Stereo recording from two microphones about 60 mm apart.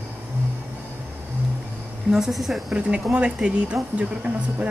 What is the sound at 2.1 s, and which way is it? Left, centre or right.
Speech, centre.